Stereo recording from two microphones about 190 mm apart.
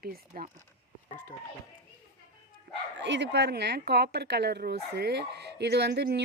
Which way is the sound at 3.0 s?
70° right (ahead or behind).